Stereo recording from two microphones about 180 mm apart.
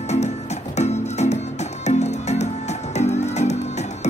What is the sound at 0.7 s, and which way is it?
Music, 40° left (ahead or behind).